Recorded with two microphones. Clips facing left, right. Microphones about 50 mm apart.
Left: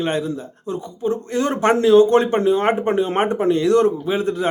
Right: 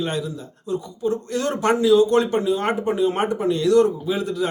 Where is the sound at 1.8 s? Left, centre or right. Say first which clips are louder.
Left 3 dB; left.